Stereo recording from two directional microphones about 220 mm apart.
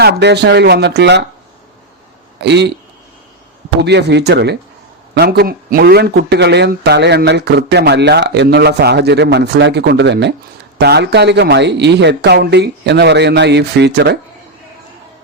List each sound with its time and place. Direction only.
0.0 s a man's voice: 50° right (ahead or behind)
2.4 s a man's voice: 50° right (ahead or behind)
3.8 s a man's voice: 50° right (ahead or behind)